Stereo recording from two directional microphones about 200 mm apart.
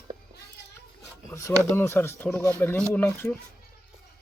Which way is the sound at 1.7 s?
10° left (ahead or behind).